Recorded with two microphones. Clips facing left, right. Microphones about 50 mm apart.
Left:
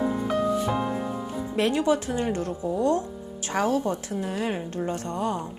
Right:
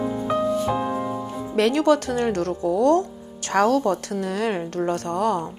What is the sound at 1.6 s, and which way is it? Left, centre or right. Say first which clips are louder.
Speech: right 5 dB; right.